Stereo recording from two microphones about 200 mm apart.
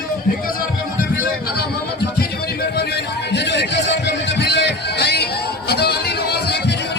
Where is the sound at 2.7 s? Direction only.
55° left (ahead or behind).